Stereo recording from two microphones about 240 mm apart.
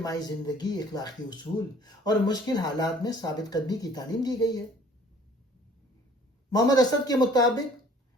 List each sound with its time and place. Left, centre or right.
0.0 s speech: centre
6.5 s speech: centre